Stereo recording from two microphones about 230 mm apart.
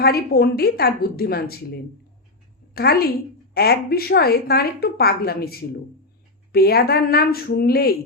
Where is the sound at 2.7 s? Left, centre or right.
Left.